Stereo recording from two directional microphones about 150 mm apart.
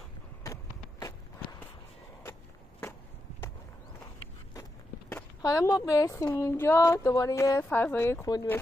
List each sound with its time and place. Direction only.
5.4 s a woman's voice: 25° left (ahead or behind)